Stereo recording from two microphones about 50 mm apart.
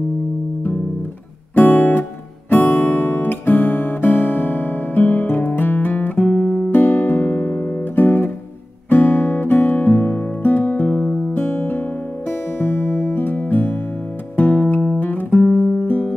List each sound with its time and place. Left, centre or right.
1.5 s guitar: left
2.5 s music: left
6.7 s music: left
11.3 s music: left
15.0 s guitar: left
15.8 s music: left